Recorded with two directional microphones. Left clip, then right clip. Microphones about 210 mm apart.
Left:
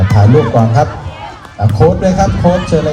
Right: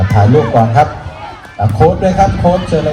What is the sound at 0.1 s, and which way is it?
A man's voice, 15° right (ahead or behind).